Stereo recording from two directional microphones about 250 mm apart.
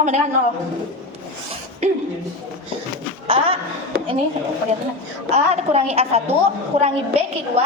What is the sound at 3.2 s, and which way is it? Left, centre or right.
Speech, right.